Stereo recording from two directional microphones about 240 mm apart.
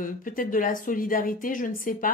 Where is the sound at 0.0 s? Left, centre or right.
Left.